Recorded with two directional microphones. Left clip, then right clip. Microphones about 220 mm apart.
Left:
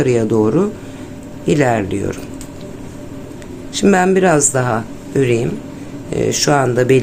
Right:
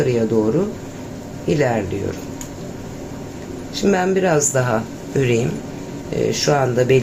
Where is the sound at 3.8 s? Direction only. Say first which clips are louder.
Left 5 dB; 30° left (ahead or behind).